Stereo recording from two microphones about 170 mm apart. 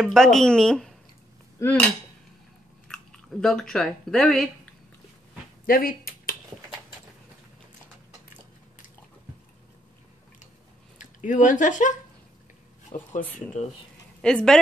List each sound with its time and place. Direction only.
0.0 s speech: centre (ahead or behind)
1.6 s cutlery: 10° left (ahead or behind)
2.9 s speech: 5° left (ahead or behind)
5.7 s speech: 55° left (ahead or behind)
11.0 s speech: 50° left (ahead or behind)
14.2 s speech: 5° left (ahead or behind)